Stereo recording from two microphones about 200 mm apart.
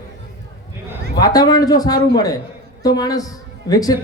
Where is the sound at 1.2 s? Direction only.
20° left (ahead or behind).